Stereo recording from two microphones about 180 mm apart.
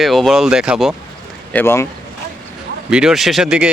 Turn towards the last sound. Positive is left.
turn(degrees=-5)  # may be behind; listen again after turning